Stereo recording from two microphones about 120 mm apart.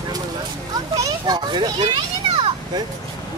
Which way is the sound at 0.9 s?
30° right (ahead or behind).